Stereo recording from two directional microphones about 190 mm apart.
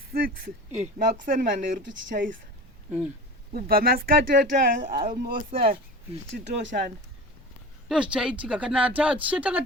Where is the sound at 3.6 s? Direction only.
50° right (ahead or behind).